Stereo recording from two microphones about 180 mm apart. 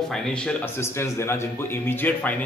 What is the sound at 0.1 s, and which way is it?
A man's voice, 5° left (ahead or behind).